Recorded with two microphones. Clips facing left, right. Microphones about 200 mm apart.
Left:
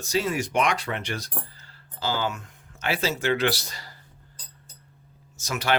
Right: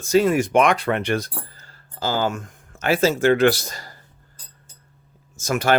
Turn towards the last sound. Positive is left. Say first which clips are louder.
# right 7 dB
turn(degrees=-50)  # may be behind; listen again after turning